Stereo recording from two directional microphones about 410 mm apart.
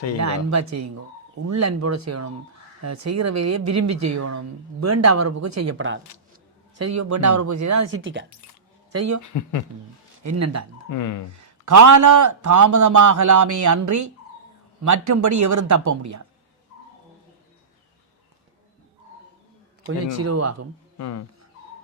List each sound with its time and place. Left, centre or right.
0.2 s speech: right
6.7 s a man's voice: right
7.9 s speech: right
8.9 s speech: right
9.3 s speech: left
10.2 s speech: right
10.8 s speech: left
11.3 s a man's voice: right
20.0 s speech: right
21.0 s speech: left